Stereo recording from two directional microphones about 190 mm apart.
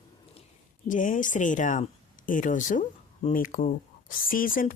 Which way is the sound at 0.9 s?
45° left (ahead or behind).